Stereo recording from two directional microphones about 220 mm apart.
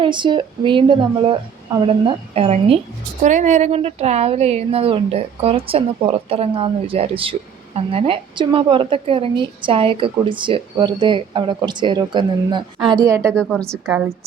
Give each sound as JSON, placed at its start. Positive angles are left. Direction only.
{"t": 0.0, "sound": "a woman's voice", "side_deg": -20}
{"t": 13.3, "sound": "speech", "side_deg": 5}
{"t": 13.8, "sound": "a woman's voice", "side_deg": -10}